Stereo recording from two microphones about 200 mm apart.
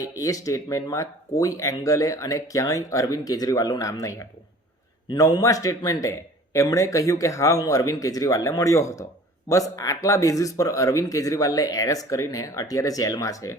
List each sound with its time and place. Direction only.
0.0 s speech: 15° left (ahead or behind)